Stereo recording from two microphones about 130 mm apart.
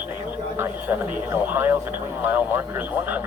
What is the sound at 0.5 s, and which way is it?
Speech, 15° right (ahead or behind).